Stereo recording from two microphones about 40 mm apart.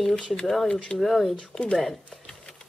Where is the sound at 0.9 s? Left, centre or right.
Centre.